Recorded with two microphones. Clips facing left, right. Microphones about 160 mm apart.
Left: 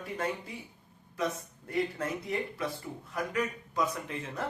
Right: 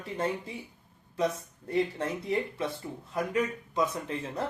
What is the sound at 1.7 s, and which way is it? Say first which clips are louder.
Speech: right 3 dB; 25° right (ahead or behind).